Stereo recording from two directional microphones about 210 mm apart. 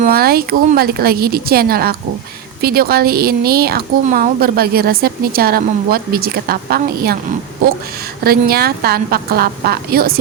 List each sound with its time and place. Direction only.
0.0 s a woman's voice: 45° right (ahead or behind)
8.2 s a woman's voice: 45° right (ahead or behind)